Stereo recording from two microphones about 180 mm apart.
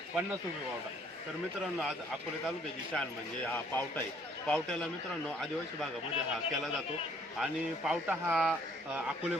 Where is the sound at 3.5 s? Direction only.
10° left (ahead or behind).